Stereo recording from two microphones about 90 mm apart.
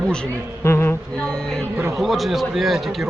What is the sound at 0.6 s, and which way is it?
Speech, 30° left (ahead or behind).